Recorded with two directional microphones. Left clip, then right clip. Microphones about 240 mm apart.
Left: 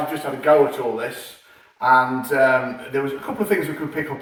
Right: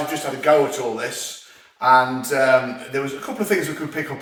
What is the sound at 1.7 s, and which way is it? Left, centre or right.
Speech, centre.